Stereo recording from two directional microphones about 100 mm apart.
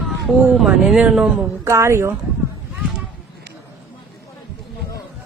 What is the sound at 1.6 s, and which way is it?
Speech, 25° right (ahead or behind).